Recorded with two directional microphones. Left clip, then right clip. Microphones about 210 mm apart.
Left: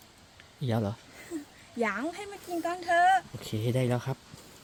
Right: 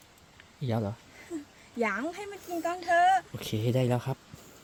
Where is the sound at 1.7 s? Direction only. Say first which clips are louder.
Even; 5° right (ahead or behind).